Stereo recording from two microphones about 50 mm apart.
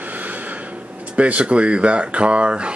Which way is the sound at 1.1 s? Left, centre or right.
Right.